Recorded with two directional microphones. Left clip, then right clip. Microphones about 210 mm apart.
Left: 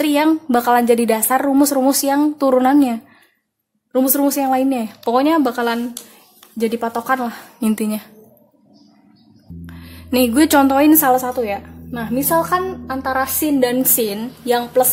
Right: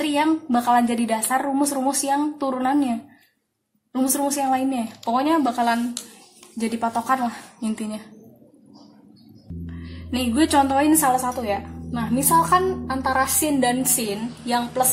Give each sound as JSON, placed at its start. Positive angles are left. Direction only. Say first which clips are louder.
{"t": 0.0, "sound": "a woman's voice", "louder": "left 5 dB", "side_deg": 45}
{"t": 9.7, "sound": "a woman's voice", "louder": "left 8 dB", "side_deg": 45}